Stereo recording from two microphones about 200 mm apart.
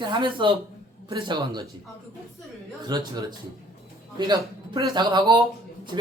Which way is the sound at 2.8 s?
20° right (ahead or behind).